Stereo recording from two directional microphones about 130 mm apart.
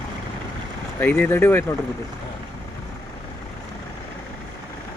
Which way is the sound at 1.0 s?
15° left (ahead or behind).